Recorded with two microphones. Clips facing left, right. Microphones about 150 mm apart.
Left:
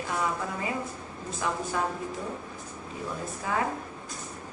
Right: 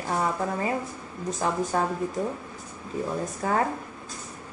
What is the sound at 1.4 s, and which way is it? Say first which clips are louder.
Speech: right 3 dB; 35° right (ahead or behind).